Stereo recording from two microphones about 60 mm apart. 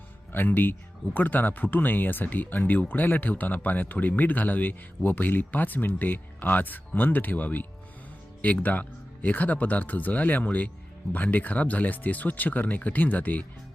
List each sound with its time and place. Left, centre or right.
0.3 s speech: left